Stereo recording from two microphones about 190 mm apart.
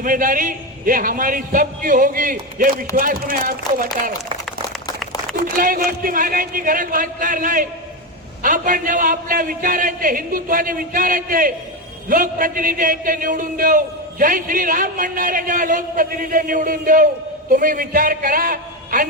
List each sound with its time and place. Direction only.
0.0 s a man's voice: 45° right (ahead or behind)
5.5 s a man's voice: 50° right (ahead or behind)